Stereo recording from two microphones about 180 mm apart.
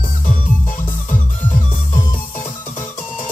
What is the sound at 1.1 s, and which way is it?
Music, 45° left (ahead or behind).